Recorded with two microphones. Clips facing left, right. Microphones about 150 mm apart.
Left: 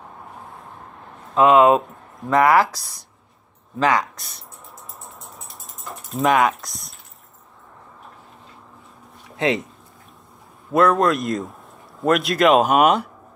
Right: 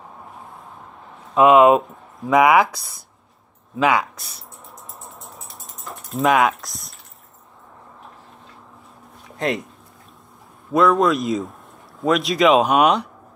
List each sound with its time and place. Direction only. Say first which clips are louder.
0.3 s vehicle: even; centre (ahead or behind)
1.3 s speech: right 1 dB; 15° right (ahead or behind)
1.7 s speech: right 1 dB; centre (ahead or behind)
5.0 s mechanisms: right 1 dB; centre (ahead or behind)
9.3 s speech: left 2 dB; centre (ahead or behind)
10.7 s speech: even; centre (ahead or behind)